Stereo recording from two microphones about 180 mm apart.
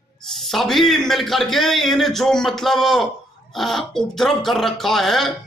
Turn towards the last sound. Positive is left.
turn(degrees=0)  # may be behind; listen again after turning